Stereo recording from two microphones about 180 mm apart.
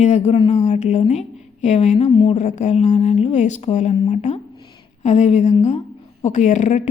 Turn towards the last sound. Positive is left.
turn(degrees=40)  # may be behind; listen again after turning